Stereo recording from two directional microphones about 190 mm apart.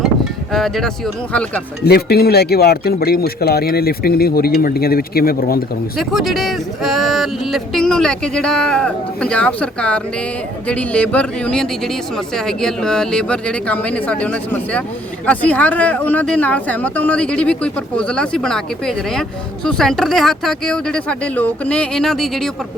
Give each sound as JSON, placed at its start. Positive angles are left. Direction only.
{"t": 0.5, "sound": "speech", "side_deg": 0}
{"t": 1.8, "sound": "speech", "side_deg": 55}
{"t": 6.0, "sound": "speech", "side_deg": 0}